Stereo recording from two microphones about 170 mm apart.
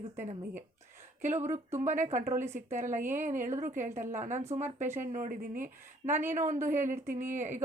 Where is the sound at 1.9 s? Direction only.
45° right (ahead or behind).